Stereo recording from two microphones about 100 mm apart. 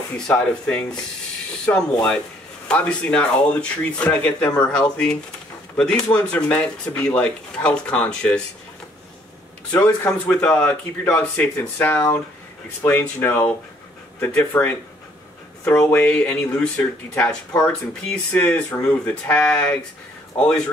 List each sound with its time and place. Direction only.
0.3 s speech: 15° left (ahead or behind)
9.7 s speech: 15° left (ahead or behind)